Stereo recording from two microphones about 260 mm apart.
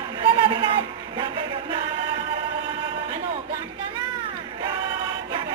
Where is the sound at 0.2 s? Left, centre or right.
Centre.